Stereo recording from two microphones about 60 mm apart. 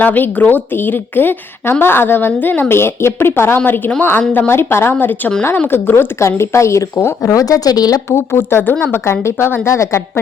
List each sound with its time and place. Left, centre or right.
0.0 s a woman's voice: left
6.1 s a woman's voice: left
7.2 s speech: left
8.1 s a woman's voice: left